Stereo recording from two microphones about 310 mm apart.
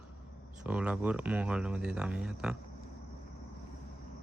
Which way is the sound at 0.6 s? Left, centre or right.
Centre.